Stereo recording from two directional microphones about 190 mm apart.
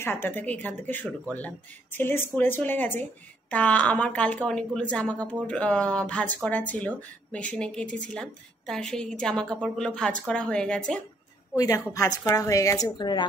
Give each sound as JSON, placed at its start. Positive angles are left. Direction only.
{"t": 0.0, "sound": "a woman's voice", "side_deg": 10}
{"t": 11.5, "sound": "a woman's voice", "side_deg": 15}